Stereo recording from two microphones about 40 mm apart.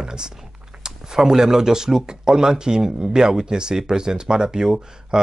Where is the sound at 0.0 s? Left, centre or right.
Centre.